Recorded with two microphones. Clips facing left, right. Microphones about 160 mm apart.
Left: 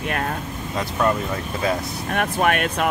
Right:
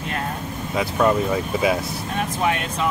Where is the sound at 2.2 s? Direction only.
65° left (ahead or behind).